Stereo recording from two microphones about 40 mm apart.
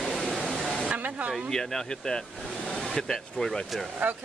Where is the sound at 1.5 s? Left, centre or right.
Centre.